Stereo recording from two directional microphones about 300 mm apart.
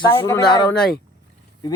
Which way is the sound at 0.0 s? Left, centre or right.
Centre.